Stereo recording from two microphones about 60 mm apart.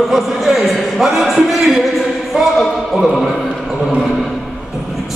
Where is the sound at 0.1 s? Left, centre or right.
Centre.